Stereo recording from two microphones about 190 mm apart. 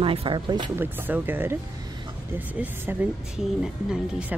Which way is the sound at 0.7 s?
10° right (ahead or behind).